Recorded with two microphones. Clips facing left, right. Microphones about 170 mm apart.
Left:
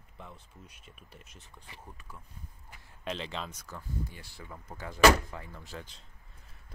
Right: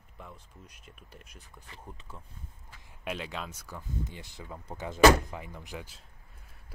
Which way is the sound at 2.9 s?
5° right (ahead or behind).